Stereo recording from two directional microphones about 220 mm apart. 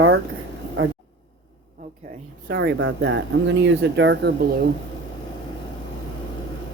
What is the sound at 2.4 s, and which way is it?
Speech, 50° right (ahead or behind).